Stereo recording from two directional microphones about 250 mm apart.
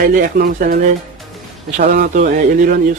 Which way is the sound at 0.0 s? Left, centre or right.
Right.